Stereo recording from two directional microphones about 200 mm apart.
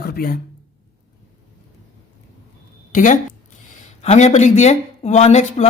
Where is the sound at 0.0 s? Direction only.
50° left (ahead or behind).